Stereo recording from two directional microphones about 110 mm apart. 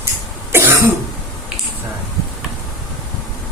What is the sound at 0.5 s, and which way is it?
Cough, 20° right (ahead or behind).